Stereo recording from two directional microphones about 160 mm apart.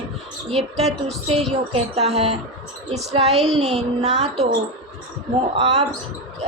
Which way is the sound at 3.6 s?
40° right (ahead or behind).